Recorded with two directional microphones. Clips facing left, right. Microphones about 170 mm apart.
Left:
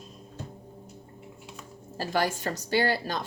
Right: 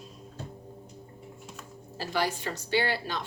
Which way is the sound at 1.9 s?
45° left (ahead or behind).